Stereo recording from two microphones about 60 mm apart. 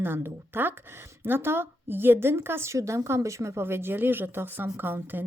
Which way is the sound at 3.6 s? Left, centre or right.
Right.